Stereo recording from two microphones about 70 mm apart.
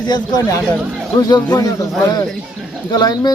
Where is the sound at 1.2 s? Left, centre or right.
Left.